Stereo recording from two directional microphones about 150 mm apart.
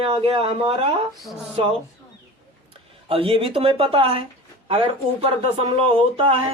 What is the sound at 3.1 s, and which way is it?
Speech, 40° right (ahead or behind).